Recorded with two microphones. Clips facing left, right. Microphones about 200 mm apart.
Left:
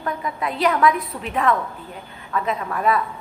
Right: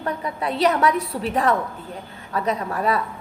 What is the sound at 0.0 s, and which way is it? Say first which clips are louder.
A woman's voice: even; 35° right (ahead or behind).